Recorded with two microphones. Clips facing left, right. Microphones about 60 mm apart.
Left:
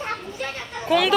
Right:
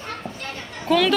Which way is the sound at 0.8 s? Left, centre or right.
Centre.